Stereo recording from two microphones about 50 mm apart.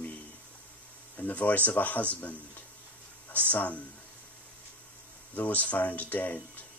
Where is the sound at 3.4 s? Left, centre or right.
Left.